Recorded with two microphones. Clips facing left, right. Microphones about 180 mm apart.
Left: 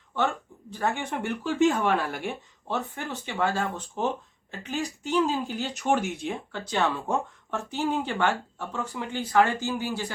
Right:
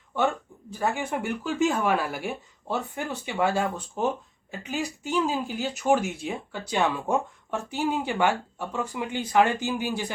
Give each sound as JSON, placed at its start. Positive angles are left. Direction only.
{"t": 0.2, "sound": "speech", "side_deg": -10}
{"t": 5.1, "sound": "speech", "side_deg": -5}